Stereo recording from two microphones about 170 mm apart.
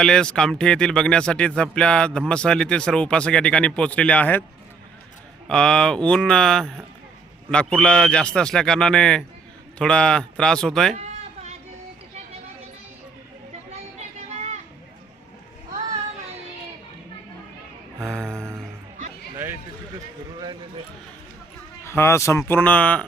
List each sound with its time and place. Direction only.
0.0 s speech: 5° left (ahead or behind)
5.5 s speech: 5° left (ahead or behind)
13.7 s a sound: 40° right (ahead or behind)
18.0 s speech: 5° left (ahead or behind)
21.8 s speech: 15° left (ahead or behind)